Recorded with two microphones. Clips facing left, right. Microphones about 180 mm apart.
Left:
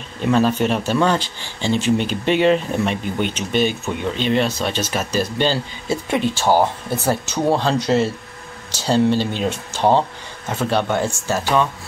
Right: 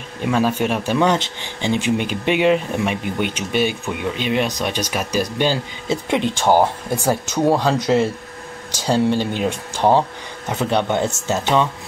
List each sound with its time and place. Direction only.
0.2 s speech: 10° right (ahead or behind)